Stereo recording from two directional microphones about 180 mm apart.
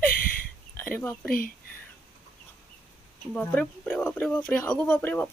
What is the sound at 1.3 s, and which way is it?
Speech, 50° left (ahead or behind).